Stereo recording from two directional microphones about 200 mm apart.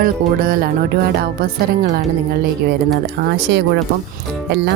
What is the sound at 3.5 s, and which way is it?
Speech, 65° right (ahead or behind).